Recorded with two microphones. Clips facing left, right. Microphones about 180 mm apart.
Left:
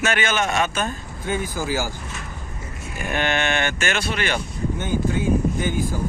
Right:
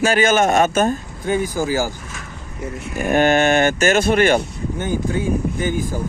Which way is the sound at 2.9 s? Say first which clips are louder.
Right 9 dB; 45° right (ahead or behind).